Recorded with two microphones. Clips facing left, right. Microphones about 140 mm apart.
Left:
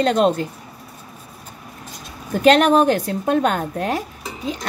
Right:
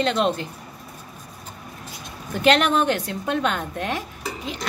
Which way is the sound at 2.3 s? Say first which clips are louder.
Left 5 dB; 40° left (ahead or behind).